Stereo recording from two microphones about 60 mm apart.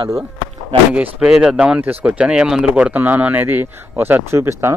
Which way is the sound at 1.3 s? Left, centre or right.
Centre.